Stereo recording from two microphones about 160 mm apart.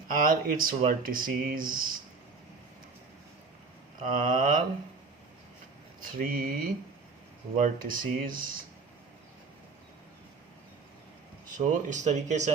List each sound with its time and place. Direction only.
0.1 s speech: 60° right (ahead or behind)
4.0 s speech: 55° right (ahead or behind)
6.0 s speech: 60° right (ahead or behind)
11.5 s speech: 50° right (ahead or behind)